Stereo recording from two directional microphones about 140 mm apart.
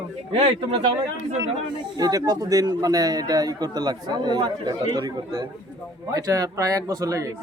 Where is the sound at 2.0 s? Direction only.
25° right (ahead or behind).